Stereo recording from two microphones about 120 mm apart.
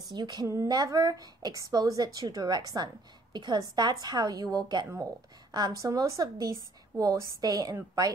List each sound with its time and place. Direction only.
0.1 s a woman's voice: 35° right (ahead or behind)